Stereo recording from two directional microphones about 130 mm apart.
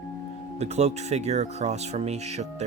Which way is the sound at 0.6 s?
55° right (ahead or behind).